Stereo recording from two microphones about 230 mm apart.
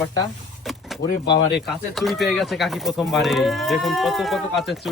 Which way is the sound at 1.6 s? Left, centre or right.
Centre.